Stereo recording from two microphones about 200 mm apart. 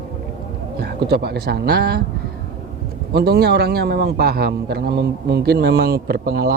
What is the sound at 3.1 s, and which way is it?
A man's voice, 55° right (ahead or behind).